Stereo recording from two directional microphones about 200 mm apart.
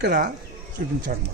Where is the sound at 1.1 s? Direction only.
45° right (ahead or behind).